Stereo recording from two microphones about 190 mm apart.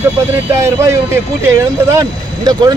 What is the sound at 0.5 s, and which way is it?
Speech, 15° right (ahead or behind).